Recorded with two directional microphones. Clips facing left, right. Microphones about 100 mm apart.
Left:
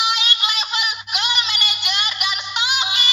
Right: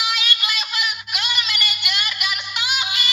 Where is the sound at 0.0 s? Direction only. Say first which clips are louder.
Left 3 dB; 25° left (ahead or behind).